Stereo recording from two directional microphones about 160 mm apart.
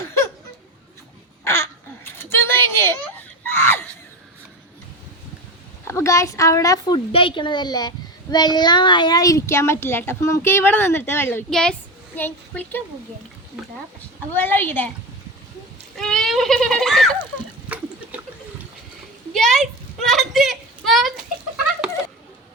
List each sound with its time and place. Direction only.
1.5 s a sound: 15° left (ahead or behind)
3.6 s screaming: 15° left (ahead or behind)
5.9 s speech: 20° left (ahead or behind)
7.1 s a child's voice: 35° left (ahead or behind); by 12.8 s 10° left (ahead or behind)
14.3 s a woman's voice: 10° left (ahead or behind)
16.0 s goat: 5° left (ahead or behind)
17.7 s water: 10° right (ahead or behind)
19.3 s a sound: centre (ahead or behind)